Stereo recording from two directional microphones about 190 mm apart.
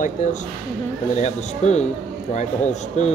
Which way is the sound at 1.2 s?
35° left (ahead or behind).